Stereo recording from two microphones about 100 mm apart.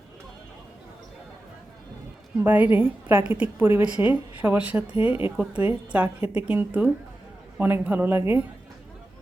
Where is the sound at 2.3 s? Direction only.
15° right (ahead or behind).